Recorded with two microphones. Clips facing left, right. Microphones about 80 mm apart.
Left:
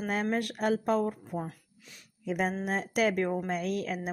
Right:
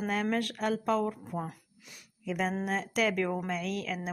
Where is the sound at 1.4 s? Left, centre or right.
Centre.